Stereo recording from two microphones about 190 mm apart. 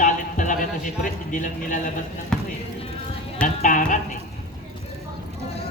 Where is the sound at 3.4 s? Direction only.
40° left (ahead or behind).